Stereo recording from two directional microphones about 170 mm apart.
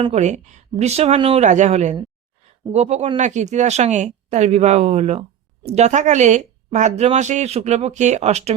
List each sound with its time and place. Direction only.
0.0 s speech: 40° right (ahead or behind)